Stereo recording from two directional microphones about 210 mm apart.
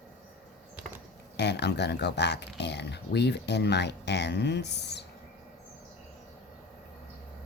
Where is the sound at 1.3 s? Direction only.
55° left (ahead or behind).